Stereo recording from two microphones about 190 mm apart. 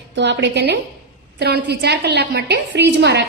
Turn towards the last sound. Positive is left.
turn(degrees=-65)  # may be behind; listen again after turning